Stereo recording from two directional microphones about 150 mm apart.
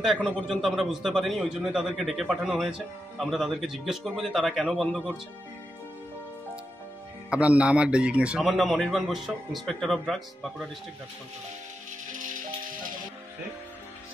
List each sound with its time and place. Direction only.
0.0 s a man's voice: centre (ahead or behind)
7.2 s a man's voice: 10° right (ahead or behind)
12.1 s music: 60° right (ahead or behind)